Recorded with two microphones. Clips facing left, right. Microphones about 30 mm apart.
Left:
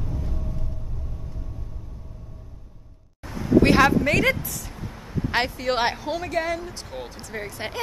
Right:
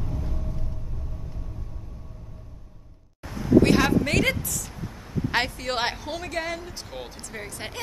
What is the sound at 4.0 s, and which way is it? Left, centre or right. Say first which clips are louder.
Speech: left 2 dB; centre.